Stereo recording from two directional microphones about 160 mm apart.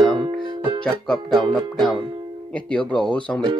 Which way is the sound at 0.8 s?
5° left (ahead or behind).